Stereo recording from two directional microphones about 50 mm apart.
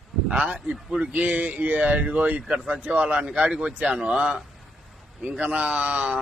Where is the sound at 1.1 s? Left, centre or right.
Right.